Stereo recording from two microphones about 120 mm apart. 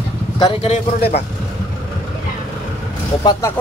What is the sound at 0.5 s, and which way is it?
Speech, 55° left (ahead or behind).